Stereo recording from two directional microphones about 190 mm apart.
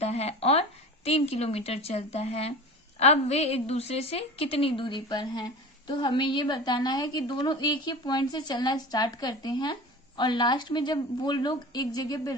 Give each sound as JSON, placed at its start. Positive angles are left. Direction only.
{"t": 0.0, "sound": "a woman's voice", "side_deg": 35}